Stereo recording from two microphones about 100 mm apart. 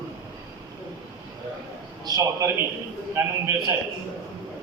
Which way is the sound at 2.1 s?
40° right (ahead or behind).